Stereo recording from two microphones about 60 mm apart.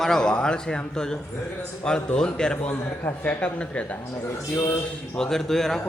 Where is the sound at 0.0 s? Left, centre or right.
Centre.